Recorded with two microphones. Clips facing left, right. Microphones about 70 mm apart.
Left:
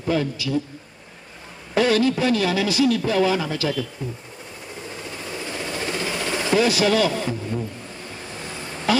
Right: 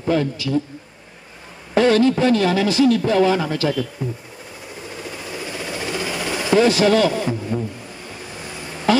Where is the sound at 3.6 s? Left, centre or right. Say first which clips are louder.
Right 4 dB; centre.